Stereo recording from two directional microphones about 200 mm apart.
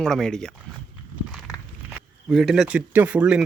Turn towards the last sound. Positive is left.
turn(degrees=-5)  # may be behind; listen again after turning